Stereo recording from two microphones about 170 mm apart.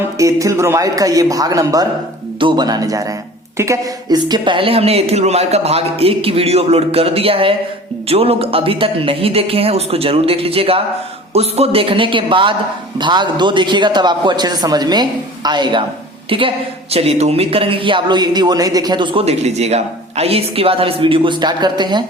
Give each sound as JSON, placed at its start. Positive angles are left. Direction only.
{"t": 0.2, "sound": "a man's voice", "side_deg": -20}